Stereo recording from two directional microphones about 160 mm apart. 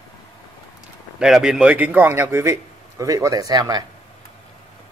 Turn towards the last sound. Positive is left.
turn(degrees=-25)  # may be behind; listen again after turning